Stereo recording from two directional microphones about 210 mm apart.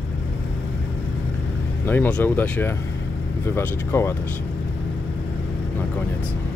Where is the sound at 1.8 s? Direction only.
10° left (ahead or behind).